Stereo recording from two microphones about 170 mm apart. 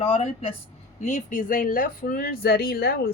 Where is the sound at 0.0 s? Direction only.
35° left (ahead or behind).